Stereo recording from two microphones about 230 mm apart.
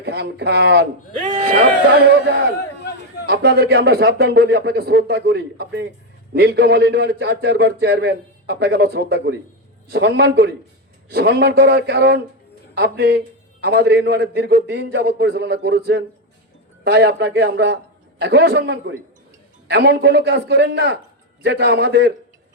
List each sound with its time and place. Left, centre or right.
0.0 s a man's voice: right
3.2 s a man's voice: right